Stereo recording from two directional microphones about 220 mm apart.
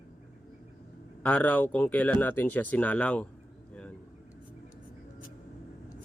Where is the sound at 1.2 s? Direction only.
5° left (ahead or behind).